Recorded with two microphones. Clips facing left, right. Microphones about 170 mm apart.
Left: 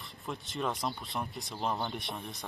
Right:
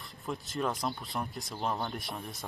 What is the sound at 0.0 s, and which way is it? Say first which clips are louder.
Speech: right 2 dB; centre (ahead or behind).